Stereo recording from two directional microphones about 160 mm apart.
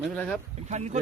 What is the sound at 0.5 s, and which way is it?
Speech, 45° right (ahead or behind).